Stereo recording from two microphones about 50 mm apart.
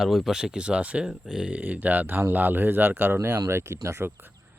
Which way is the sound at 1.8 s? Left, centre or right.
Right.